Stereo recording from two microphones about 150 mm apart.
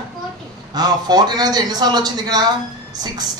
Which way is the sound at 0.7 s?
25° right (ahead or behind).